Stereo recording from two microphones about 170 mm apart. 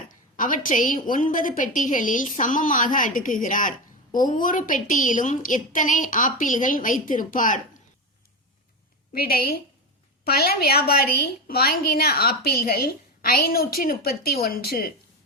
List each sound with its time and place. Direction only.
0.3 s a woman's voice: 50° left (ahead or behind)
9.1 s a woman's voice: 60° left (ahead or behind)